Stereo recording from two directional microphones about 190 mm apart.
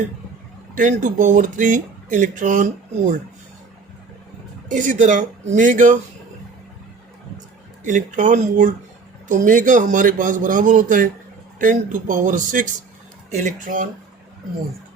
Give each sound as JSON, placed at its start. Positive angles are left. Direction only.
{"t": 0.8, "sound": "speech", "side_deg": -40}
{"t": 4.7, "sound": "speech", "side_deg": -40}
{"t": 7.9, "sound": "speech", "side_deg": -40}